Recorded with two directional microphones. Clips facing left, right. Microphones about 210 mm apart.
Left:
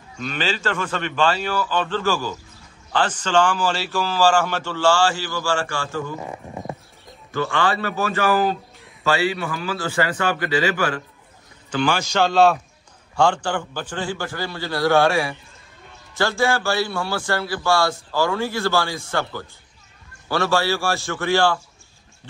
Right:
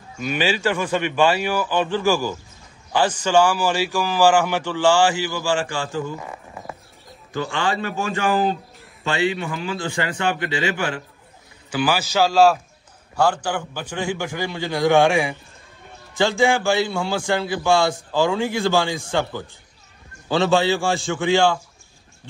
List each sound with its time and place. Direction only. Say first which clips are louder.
0.2 s a man's voice: right 4 dB; 10° right (ahead or behind)
6.2 s a sound: left 4 dB; 20° left (ahead or behind)
7.3 s a man's voice: left 2 dB; 15° right (ahead or behind)
11.7 s a man's voice: even; 5° right (ahead or behind)